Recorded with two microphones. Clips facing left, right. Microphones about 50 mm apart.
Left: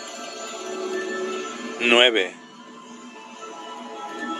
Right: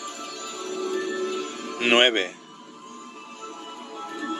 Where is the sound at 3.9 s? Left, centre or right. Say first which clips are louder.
Even; left.